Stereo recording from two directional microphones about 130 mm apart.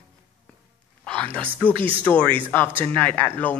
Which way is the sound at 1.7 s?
45° right (ahead or behind).